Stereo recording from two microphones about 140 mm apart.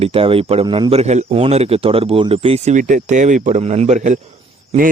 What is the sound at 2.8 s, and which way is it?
Speech, 60° right (ahead or behind).